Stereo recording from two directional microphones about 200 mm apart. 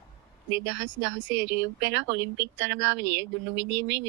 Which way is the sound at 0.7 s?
65° right (ahead or behind).